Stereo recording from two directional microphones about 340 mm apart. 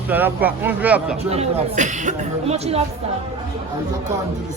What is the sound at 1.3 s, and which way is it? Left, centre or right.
Speech, centre.